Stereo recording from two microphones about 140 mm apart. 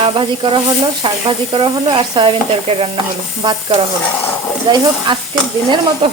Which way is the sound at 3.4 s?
30° right (ahead or behind).